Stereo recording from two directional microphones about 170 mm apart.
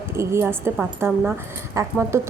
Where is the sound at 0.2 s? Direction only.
15° right (ahead or behind).